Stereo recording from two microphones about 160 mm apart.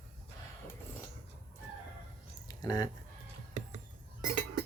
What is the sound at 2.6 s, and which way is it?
Speech, 25° left (ahead or behind).